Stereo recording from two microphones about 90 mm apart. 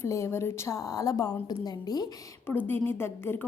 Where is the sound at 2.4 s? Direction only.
25° left (ahead or behind).